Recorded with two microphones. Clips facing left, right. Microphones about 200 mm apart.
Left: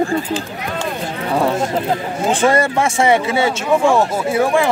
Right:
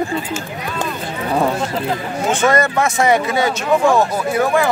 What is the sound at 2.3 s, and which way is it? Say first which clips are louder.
Speech: left 1 dB; 30° left (ahead or behind).